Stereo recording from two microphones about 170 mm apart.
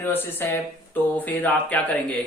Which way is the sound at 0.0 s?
10° left (ahead or behind).